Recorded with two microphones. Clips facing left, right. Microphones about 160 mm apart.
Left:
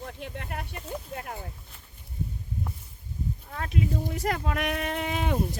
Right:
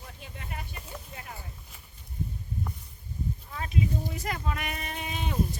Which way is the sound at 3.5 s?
55° left (ahead or behind).